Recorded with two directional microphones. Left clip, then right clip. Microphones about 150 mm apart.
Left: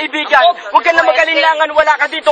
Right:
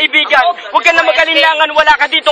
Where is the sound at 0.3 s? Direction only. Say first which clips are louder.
Left 6 dB; 20° left (ahead or behind).